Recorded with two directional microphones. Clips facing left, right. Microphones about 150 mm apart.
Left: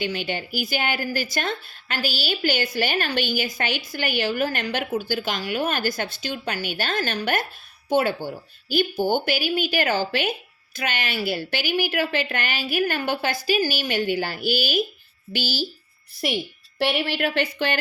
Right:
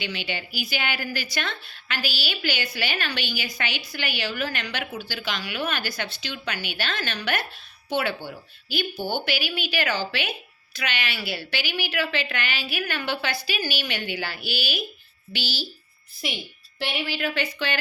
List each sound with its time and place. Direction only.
0.0 s speech: 45° left (ahead or behind)
16.7 s speech: 60° left (ahead or behind)